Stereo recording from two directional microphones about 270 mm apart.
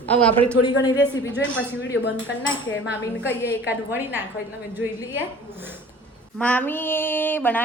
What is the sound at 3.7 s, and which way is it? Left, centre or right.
A woman's voice, centre.